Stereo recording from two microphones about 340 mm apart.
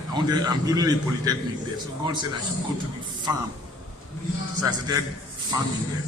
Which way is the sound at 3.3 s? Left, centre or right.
Centre.